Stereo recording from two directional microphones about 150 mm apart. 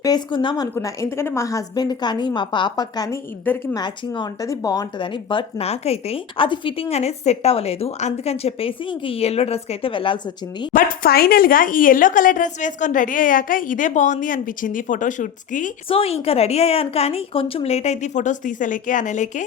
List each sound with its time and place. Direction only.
0.0 s a woman's voice: 30° left (ahead or behind)
3.4 s a woman's voice: 15° left (ahead or behind)
3.8 s speech: 30° left (ahead or behind)
10.7 s speech: 65° left (ahead or behind)
15.9 s a woman's voice: 40° left (ahead or behind)